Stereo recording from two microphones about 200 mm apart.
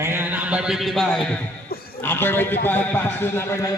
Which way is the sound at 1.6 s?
50° left (ahead or behind).